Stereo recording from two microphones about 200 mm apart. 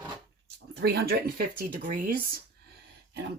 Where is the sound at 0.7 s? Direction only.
55° right (ahead or behind).